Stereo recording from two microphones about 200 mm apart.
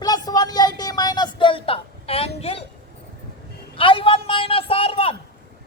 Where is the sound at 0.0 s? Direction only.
20° left (ahead or behind).